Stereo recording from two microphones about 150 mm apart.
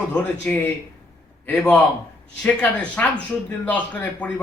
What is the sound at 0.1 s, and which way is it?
A man's voice, 10° left (ahead or behind).